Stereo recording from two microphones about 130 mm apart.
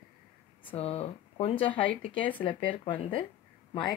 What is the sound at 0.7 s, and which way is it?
Speech, 50° left (ahead or behind).